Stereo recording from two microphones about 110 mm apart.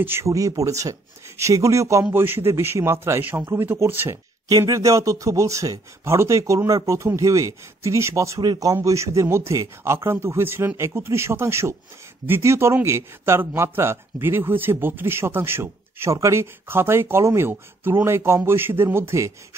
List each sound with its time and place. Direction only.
0.0 s a man's voice: 20° right (ahead or behind)
0.3 s a man's voice: 30° right (ahead or behind)
4.5 s a man's voice: 30° right (ahead or behind)